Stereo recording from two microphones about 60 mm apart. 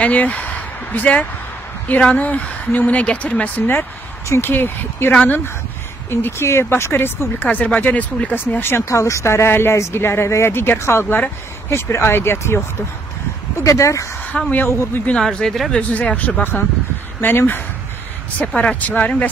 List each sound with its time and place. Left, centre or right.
0.0 s a sound: left
2.0 s speech: left
6.0 s speech: left
7.4 s speech: left
8.4 s speech: left
8.8 s speech: left
13.7 s speech: left
14.3 s speech: centre
15.7 s speech: left
18.5 s speech: centre